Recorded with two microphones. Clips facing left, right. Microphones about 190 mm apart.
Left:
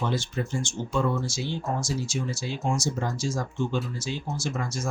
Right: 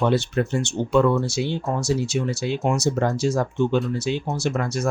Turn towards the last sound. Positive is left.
turn(degrees=-65)  # may be behind; listen again after turning